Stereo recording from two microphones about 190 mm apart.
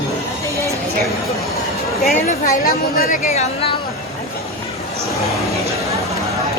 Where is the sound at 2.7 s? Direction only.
50° left (ahead or behind).